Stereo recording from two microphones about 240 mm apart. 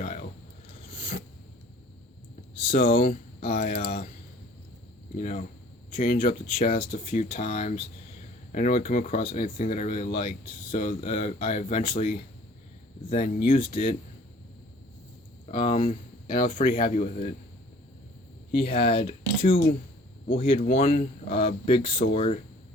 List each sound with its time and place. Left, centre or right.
0.0 s a sound: left
2.6 s a sound: left
2.8 s speech: left
5.1 s speech: left
13.1 s speech: left
15.4 s speech: left
16.5 s speech: left
18.5 s speech: left
20.3 s speech: left